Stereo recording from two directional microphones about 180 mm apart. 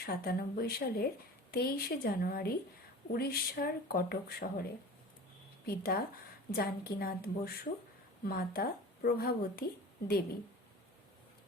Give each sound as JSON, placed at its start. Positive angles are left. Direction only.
{"t": 0.0, "sound": "speech", "side_deg": 60}
{"t": 5.6, "sound": "speech", "side_deg": 55}